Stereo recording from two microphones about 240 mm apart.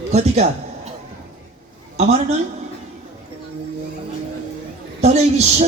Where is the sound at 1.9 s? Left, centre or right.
Right.